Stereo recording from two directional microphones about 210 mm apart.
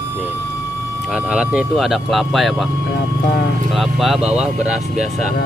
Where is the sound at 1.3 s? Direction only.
5° right (ahead or behind).